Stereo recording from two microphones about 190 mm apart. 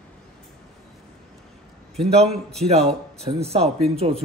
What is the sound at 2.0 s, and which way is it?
Speech, 35° right (ahead or behind).